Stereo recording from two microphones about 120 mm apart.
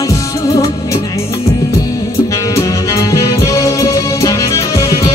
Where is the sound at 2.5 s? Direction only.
25° left (ahead or behind).